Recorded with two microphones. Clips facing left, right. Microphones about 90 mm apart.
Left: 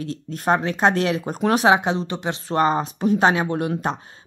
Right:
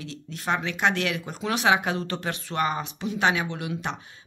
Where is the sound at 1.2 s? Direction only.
45° left (ahead or behind); by 2.4 s 20° left (ahead or behind).